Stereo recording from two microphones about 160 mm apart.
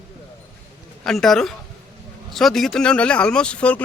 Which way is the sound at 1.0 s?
5° left (ahead or behind).